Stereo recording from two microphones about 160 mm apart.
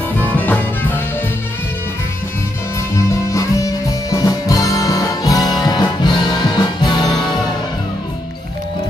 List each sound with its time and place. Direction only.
0.2 s music: 10° left (ahead or behind)
3.1 s music: 20° left (ahead or behind)